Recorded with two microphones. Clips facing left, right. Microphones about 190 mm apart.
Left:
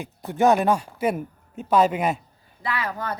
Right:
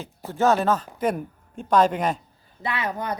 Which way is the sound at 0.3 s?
15° left (ahead or behind).